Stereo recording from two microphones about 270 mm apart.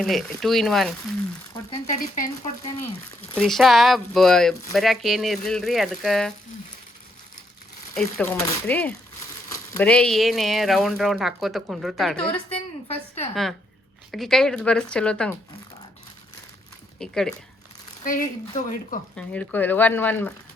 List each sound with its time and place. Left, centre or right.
0.0 s speech: centre
1.9 s speech: left
3.3 s speech: centre
7.9 s speech: centre
12.3 s a sound: left
13.1 s a woman's voice: centre
17.0 s speech: centre
18.0 s speech: left
19.1 s speech: centre